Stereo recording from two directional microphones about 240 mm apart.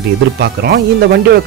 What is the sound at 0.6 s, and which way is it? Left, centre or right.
Speech, right.